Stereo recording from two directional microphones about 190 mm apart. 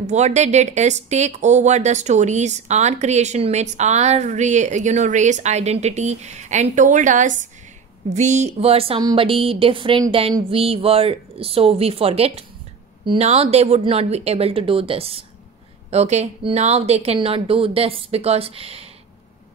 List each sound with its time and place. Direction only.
0.0 s speech: 35° right (ahead or behind)